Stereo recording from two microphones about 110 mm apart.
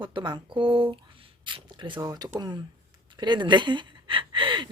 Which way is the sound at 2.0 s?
35° right (ahead or behind).